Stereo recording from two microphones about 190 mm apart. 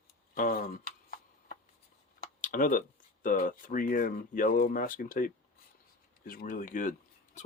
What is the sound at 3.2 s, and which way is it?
Speech, 45° left (ahead or behind).